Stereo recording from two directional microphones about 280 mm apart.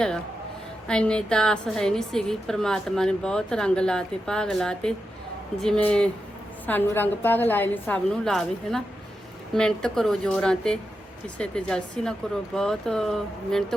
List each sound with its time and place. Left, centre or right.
0.9 s a woman's voice: centre